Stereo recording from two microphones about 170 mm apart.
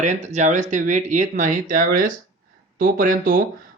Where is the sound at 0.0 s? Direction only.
45° right (ahead or behind).